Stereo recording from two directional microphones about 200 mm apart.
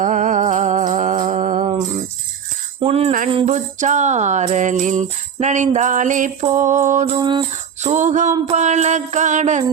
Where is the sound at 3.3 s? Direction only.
30° right (ahead or behind).